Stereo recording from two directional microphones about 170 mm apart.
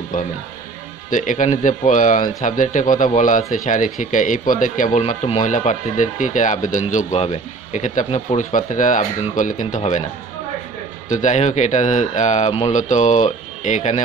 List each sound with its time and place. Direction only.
0.1 s speech: 50° left (ahead or behind)
11.1 s speech: 45° left (ahead or behind)